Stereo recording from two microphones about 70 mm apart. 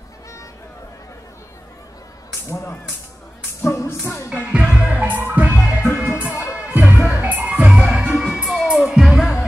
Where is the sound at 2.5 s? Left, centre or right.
Left.